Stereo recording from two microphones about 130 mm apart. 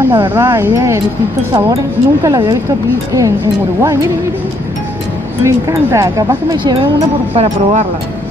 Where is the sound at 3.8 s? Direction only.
25° right (ahead or behind).